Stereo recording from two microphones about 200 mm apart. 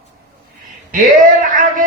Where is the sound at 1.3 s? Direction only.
40° right (ahead or behind).